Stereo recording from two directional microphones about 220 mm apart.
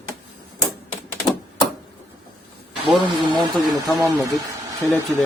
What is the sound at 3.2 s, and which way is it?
Speech, 20° right (ahead or behind).